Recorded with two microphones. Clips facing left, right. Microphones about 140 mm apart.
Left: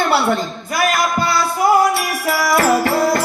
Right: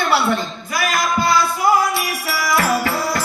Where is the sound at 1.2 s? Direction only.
50° left (ahead or behind).